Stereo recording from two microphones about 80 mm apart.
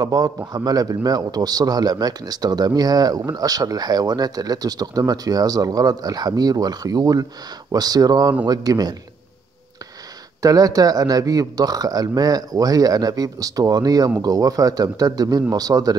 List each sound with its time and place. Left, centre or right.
0.0 s a man's voice: right
10.4 s speech: right